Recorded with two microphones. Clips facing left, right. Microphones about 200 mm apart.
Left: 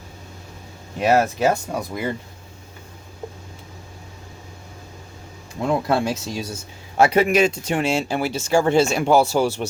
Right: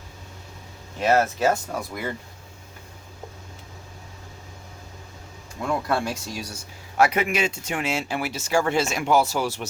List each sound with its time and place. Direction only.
0.9 s speech: 15° left (ahead or behind)
5.6 s a man's voice: 25° left (ahead or behind)